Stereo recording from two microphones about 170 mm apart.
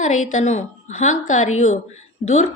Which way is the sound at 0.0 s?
45° left (ahead or behind).